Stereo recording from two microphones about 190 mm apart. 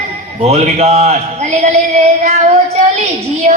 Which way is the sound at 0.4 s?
35° right (ahead or behind).